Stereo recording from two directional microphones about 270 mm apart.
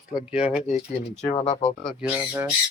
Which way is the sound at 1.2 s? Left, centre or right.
Left.